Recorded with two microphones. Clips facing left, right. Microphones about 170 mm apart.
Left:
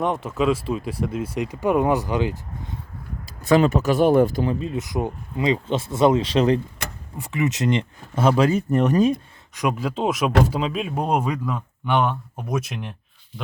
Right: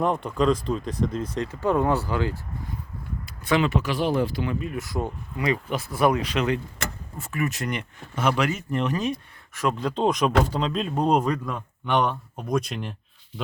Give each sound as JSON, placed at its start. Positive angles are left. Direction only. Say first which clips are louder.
{"t": 0.0, "sound": "speech", "louder": "left 1 dB", "side_deg": 0}
{"t": 3.4, "sound": "speech", "louder": "left 5 dB", "side_deg": 40}
{"t": 4.6, "sound": "speech", "louder": "left 3 dB", "side_deg": 20}
{"t": 7.2, "sound": "speech", "louder": "left 5 dB", "side_deg": 20}
{"t": 9.6, "sound": "speech", "louder": "left 1 dB", "side_deg": 10}